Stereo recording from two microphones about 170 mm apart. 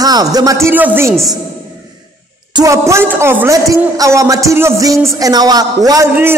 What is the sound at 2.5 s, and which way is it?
A woman's voice, 20° right (ahead or behind).